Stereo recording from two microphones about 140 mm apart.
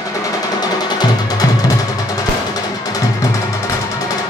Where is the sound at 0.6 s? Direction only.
30° left (ahead or behind).